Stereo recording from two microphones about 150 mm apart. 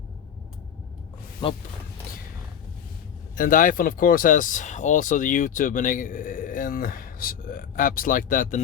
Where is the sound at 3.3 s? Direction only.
65° left (ahead or behind).